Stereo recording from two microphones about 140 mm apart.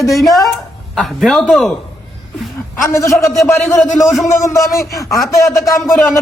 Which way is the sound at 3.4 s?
20° left (ahead or behind).